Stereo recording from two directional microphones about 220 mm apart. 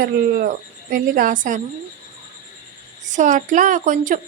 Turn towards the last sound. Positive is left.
turn(degrees=-35)  # may be behind; listen again after turning